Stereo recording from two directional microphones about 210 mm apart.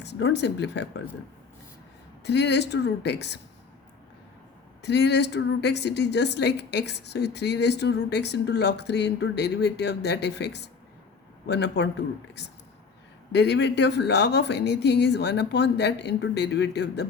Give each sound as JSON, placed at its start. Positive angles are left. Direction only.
{"t": 0.0, "sound": "a sound", "side_deg": 55}
{"t": 0.3, "sound": "speech", "side_deg": 55}
{"t": 2.2, "sound": "speech", "side_deg": 55}
{"t": 4.8, "sound": "a woman's voice", "side_deg": 55}
{"t": 13.3, "sound": "speech", "side_deg": 55}